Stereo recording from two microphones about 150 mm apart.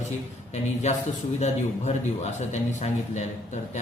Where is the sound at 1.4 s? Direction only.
50° left (ahead or behind).